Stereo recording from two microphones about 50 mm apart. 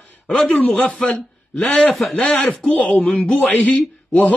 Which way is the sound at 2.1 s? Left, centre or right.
Left.